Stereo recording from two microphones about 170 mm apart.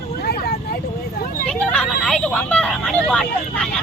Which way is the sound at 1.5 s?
5° left (ahead or behind).